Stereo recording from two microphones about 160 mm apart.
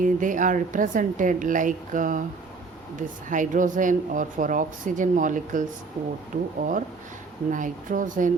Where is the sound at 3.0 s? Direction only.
55° right (ahead or behind).